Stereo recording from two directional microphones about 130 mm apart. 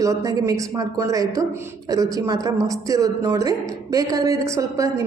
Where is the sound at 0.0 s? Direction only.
25° right (ahead or behind).